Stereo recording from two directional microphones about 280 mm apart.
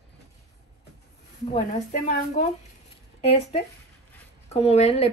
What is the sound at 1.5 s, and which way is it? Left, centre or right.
Speech, left.